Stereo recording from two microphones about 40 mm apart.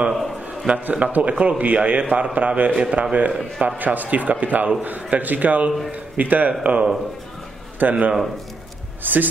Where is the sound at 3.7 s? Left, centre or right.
Right.